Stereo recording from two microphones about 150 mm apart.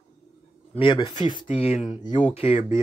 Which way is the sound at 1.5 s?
45° left (ahead or behind).